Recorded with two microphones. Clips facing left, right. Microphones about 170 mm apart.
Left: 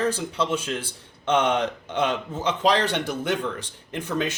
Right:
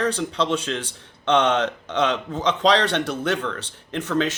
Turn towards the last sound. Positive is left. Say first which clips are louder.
# right 4 dB
turn(degrees=10)  # may be behind; listen again after turning